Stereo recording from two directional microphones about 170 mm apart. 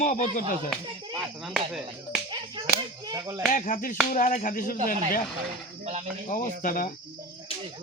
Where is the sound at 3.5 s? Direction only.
50° left (ahead or behind).